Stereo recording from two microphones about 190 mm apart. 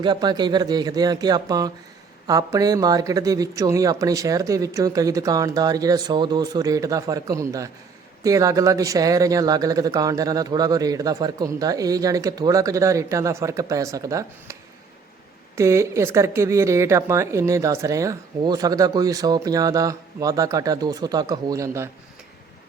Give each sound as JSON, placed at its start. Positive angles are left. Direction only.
{"t": 0.0, "sound": "speech", "side_deg": -20}
{"t": 15.5, "sound": "speech", "side_deg": -15}